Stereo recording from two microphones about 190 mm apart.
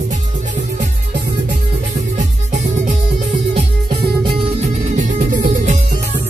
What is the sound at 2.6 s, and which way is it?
Music, 40° right (ahead or behind).